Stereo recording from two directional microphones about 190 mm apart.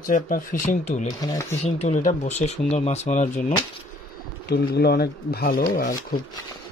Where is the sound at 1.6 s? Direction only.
35° left (ahead or behind).